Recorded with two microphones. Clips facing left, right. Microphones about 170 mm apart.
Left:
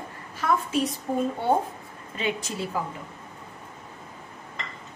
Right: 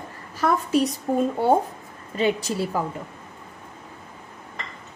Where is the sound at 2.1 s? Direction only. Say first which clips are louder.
Right 7 dB; 35° right (ahead or behind).